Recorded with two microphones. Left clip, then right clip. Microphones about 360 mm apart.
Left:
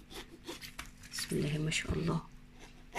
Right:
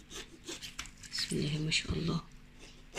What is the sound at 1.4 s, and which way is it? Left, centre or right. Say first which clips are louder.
Speech: right 1 dB; left.